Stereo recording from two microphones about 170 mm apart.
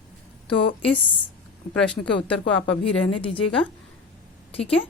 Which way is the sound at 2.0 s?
5° left (ahead or behind).